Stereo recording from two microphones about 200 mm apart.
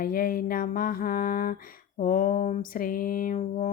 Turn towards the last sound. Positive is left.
turn(degrees=40)  # may be behind; listen again after turning